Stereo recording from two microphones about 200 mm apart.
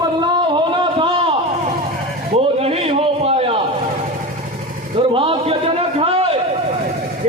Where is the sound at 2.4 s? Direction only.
30° right (ahead or behind).